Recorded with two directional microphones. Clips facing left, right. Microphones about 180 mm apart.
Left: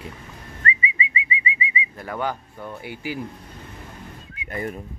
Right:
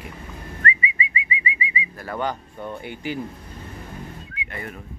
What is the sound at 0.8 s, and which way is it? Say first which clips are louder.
Bird: even; 25° left (ahead or behind).